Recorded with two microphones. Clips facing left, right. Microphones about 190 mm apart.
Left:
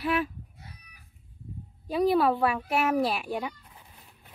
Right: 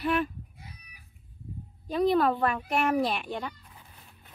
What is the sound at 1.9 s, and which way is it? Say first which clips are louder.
Speech: left 1 dB; 10° left (ahead or behind).